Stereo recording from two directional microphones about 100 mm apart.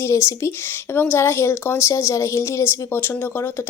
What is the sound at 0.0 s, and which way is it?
A woman's voice, 30° left (ahead or behind).